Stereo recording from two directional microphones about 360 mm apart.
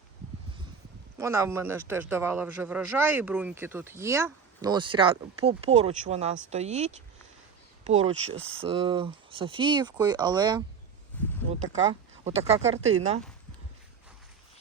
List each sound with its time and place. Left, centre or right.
1.2 s speech: centre
12.2 s speech: centre